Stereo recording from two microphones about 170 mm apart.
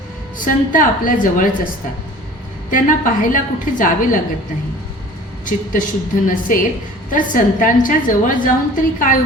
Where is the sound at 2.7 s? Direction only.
55° left (ahead or behind).